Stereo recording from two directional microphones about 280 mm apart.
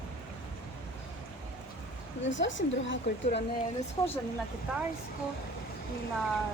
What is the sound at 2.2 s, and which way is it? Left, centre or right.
Speech, left.